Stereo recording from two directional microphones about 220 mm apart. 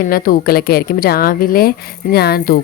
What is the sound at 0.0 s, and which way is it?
A woman's voice, 40° left (ahead or behind).